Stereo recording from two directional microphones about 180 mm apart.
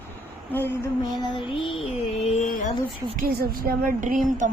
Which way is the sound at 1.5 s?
30° left (ahead or behind).